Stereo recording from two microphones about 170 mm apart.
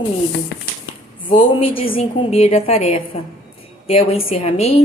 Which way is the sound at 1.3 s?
30° left (ahead or behind).